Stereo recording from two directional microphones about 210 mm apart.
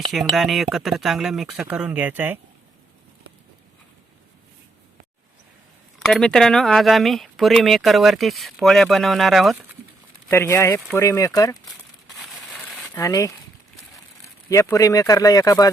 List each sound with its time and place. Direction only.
0.1 s speech: centre (ahead or behind)
6.1 s speech: centre (ahead or behind)
10.2 s speech: 10° left (ahead or behind)
12.2 s crushing: centre (ahead or behind)
12.9 s speech: 15° left (ahead or behind)
14.5 s speech: 15° left (ahead or behind)